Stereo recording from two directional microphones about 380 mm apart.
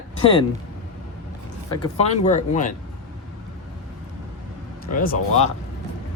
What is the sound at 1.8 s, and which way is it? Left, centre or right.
Speech, centre.